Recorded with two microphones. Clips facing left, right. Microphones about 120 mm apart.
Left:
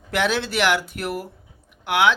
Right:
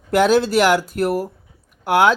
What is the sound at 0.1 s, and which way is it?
Speech, 40° right (ahead or behind).